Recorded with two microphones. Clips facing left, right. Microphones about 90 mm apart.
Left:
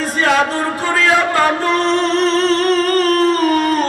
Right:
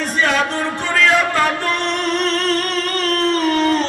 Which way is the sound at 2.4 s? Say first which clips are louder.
Left 6 dB; 35° left (ahead or behind).